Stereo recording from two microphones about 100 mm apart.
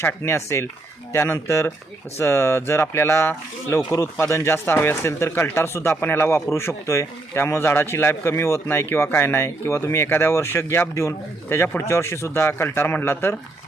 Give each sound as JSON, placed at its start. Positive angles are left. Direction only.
{"t": 0.0, "sound": "speech", "side_deg": 20}